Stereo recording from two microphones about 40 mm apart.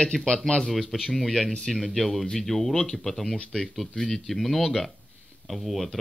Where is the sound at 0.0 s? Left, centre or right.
Centre.